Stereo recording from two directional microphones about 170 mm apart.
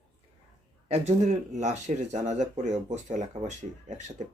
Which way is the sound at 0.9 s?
40° right (ahead or behind).